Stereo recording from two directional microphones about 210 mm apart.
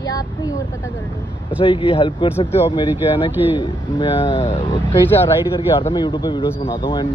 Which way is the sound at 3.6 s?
25° left (ahead or behind).